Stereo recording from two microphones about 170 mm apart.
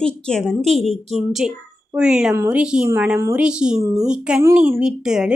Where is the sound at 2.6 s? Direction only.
5° right (ahead or behind).